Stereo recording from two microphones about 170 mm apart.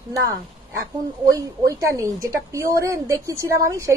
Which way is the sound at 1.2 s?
20° right (ahead or behind).